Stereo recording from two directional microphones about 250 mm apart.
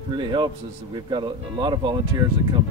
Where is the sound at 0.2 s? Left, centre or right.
Centre.